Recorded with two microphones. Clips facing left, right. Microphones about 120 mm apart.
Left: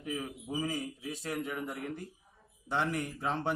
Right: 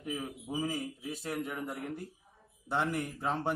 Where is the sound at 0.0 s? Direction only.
5° right (ahead or behind).